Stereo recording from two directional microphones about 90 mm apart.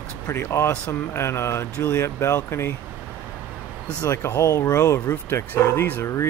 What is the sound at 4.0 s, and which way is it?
Speech, 40° left (ahead or behind).